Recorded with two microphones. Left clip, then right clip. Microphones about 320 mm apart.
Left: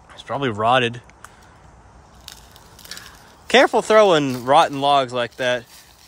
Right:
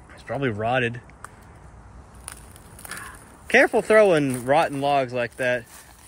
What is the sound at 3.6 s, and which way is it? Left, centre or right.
Speech, centre.